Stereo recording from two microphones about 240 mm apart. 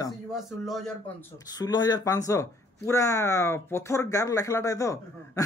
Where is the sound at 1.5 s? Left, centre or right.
Centre.